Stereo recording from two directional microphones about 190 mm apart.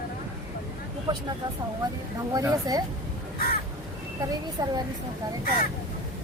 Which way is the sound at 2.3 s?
20° right (ahead or behind).